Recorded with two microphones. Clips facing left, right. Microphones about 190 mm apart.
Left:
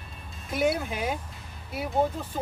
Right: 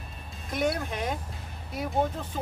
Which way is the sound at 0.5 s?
5° left (ahead or behind).